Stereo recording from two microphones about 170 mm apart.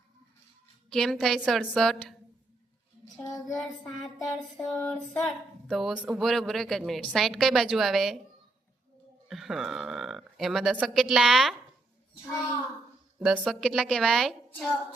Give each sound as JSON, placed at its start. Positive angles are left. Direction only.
{"t": 0.9, "sound": "speech", "side_deg": 0}
{"t": 3.2, "sound": "child singing", "side_deg": 15}
{"t": 3.4, "sound": "speech", "side_deg": 0}
{"t": 9.3, "sound": "speech", "side_deg": 0}
{"t": 13.1, "sound": "speech", "side_deg": -5}